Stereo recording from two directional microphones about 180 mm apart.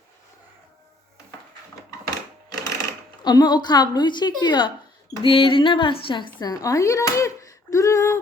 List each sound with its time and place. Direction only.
2.0 s sewing machine: 20° left (ahead or behind)
3.2 s a woman's voice: 25° left (ahead or behind)